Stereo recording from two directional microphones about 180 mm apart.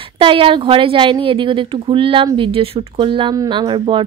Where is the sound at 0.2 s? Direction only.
30° right (ahead or behind).